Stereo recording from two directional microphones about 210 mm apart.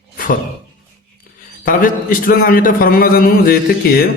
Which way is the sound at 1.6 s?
40° left (ahead or behind).